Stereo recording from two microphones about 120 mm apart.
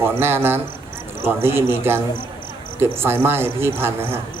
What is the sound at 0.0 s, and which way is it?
Speech, 20° right (ahead or behind).